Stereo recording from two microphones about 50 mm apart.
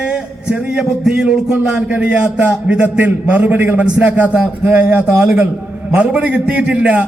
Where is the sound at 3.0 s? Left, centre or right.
Right.